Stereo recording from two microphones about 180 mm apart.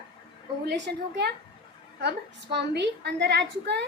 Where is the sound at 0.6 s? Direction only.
75° right (ahead or behind).